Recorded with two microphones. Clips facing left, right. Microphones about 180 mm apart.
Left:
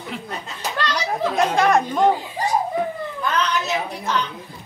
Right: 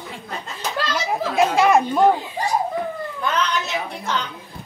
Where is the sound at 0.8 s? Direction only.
5° right (ahead or behind).